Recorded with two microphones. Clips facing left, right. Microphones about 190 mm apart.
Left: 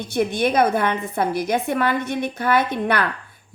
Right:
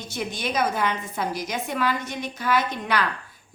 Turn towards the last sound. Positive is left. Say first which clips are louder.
# left 4 dB
turn(degrees=55)  # may be behind; listen again after turning